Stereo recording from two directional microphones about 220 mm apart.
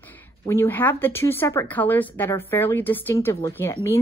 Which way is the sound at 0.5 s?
10° left (ahead or behind).